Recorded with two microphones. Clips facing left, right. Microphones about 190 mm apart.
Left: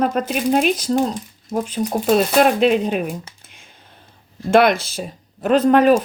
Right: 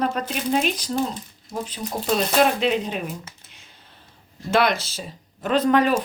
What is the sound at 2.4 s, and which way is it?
Speech, 55° left (ahead or behind).